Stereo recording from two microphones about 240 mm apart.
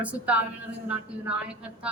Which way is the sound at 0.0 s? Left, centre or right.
Centre.